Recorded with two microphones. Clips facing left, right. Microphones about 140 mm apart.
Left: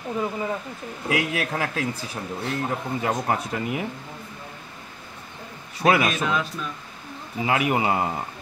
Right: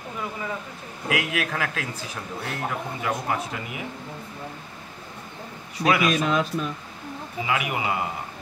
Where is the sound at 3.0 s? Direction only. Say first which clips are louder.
Left 3 dB; 40° left (ahead or behind).